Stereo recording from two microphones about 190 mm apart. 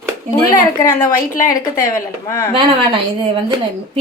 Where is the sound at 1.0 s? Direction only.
45° left (ahead or behind).